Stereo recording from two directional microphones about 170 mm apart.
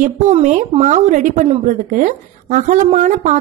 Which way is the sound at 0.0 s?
45° right (ahead or behind).